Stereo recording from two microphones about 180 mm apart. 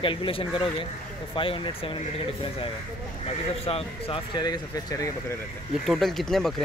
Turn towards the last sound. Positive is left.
turn(degrees=0)  # may be behind; listen again after turning